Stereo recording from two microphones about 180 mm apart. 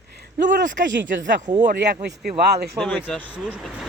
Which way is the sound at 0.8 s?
90° right.